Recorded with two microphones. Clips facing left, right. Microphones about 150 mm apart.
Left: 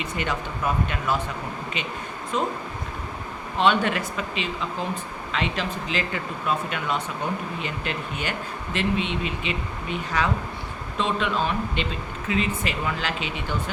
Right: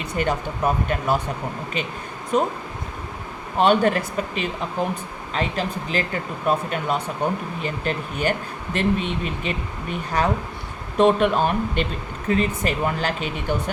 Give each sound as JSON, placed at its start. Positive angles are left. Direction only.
{"t": 0.2, "sound": "speech", "side_deg": -40}
{"t": 2.3, "sound": "speech", "side_deg": -50}
{"t": 3.6, "sound": "speech", "side_deg": -45}
{"t": 10.9, "sound": "speech", "side_deg": -55}